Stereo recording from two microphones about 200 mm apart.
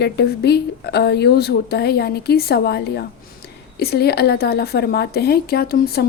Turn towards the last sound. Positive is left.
turn(degrees=50)  # may be behind; listen again after turning